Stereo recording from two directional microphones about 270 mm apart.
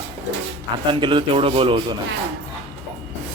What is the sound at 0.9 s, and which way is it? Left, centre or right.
A man's voice, centre.